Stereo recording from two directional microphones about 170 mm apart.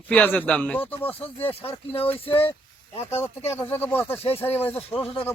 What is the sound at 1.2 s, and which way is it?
Speech, 35° left (ahead or behind).